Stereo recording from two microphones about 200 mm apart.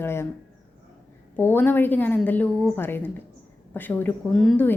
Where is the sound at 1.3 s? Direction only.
10° left (ahead or behind).